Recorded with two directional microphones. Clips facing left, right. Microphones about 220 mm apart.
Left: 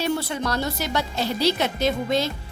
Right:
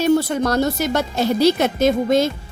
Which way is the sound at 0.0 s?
45° right (ahead or behind).